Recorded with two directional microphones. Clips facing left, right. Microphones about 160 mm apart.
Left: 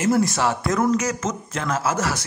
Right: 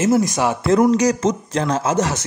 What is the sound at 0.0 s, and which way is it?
Speech, 20° right (ahead or behind).